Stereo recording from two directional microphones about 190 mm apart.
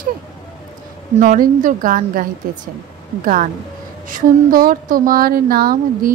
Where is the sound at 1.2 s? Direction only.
45° right (ahead or behind).